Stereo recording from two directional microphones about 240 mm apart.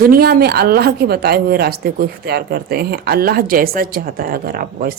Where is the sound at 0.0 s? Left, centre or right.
Right.